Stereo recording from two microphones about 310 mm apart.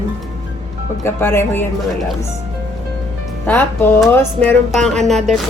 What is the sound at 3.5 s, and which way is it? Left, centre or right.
Speech, centre.